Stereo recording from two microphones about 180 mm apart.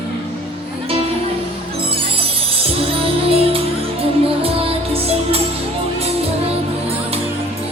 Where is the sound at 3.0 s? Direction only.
30° right (ahead or behind).